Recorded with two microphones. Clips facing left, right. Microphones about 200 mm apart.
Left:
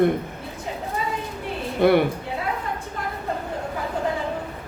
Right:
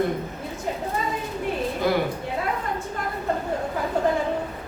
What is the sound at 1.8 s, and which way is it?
Speech, 60° left (ahead or behind).